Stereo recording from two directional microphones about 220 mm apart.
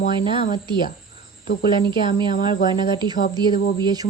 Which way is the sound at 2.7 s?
20° right (ahead or behind).